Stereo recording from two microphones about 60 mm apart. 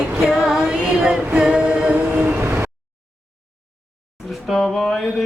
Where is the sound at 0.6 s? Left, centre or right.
Centre.